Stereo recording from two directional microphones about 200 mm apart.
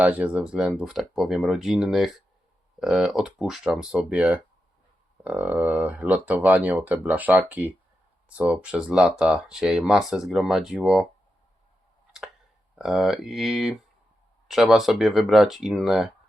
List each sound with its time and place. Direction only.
0.0 s speech: 5° right (ahead or behind)
12.8 s speech: centre (ahead or behind)